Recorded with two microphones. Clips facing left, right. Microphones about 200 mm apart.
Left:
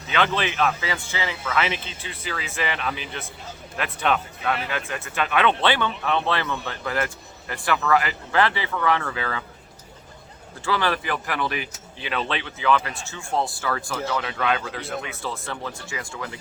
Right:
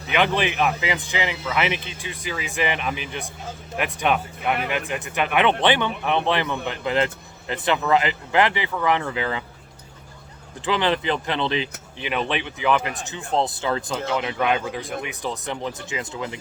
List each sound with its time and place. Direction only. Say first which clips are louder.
0.1 s speech: right 2 dB; 15° right (ahead or behind)
10.7 s speech: right 3 dB; 20° right (ahead or behind)